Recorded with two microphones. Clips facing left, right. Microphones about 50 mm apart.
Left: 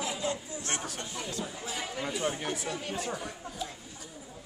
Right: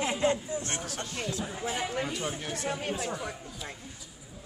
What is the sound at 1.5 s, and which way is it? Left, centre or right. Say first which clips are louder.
Speech: right 5 dB; right.